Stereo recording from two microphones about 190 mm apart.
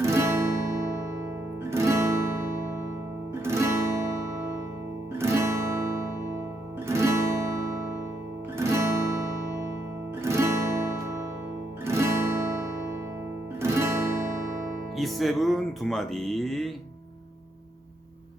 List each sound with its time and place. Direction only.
0.0 s guitar: 15° right (ahead or behind)
5.1 s guitar: 15° right (ahead or behind)
6.8 s music: 15° right (ahead or behind)
8.5 s music: 15° right (ahead or behind)
10.2 s music: 15° right (ahead or behind)
11.9 s guitar: 15° right (ahead or behind)
13.6 s music: 15° right (ahead or behind)
14.9 s speech: centre (ahead or behind)